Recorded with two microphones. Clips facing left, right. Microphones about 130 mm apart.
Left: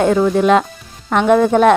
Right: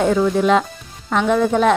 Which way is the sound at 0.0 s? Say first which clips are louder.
Left 3 dB; 55° left (ahead or behind).